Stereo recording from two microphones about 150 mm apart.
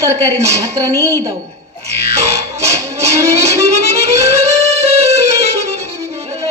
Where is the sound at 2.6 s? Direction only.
20° right (ahead or behind).